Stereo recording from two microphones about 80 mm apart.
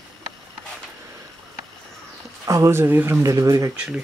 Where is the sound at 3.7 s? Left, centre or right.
Centre.